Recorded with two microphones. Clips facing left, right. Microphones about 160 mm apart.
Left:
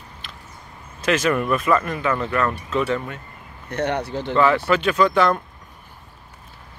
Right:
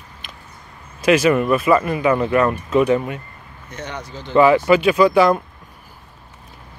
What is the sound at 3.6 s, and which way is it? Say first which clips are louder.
Speech: left 8 dB; 65° left (ahead or behind).